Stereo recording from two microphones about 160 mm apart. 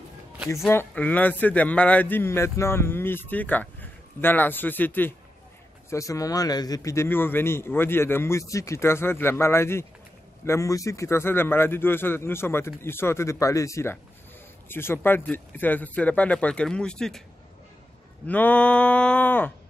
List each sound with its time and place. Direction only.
0.7 s a man's voice: 10° left (ahead or behind)
18.2 s a man's voice: 10° left (ahead or behind)